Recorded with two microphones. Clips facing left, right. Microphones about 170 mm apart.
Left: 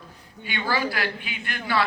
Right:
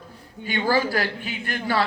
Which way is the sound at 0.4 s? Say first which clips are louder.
Right 6 dB; 20° right (ahead or behind).